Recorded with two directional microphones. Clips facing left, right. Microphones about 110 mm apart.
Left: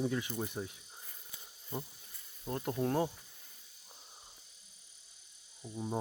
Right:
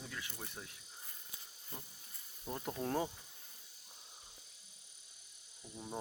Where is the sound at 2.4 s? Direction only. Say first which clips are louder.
Left 6 dB; centre (ahead or behind).